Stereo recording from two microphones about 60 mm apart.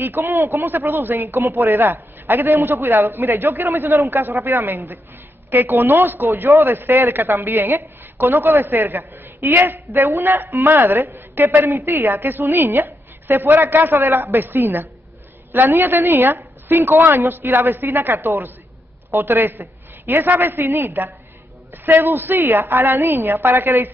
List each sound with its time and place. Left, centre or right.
0.0 s a woman's voice: right
1.2 s a woman's voice: right
4.4 s speech: right
4.6 s a woman's voice: right